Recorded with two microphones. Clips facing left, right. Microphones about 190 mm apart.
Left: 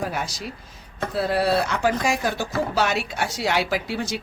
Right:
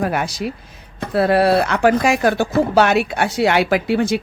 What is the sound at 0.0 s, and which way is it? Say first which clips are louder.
Speech: right 8 dB; 60° right (ahead or behind).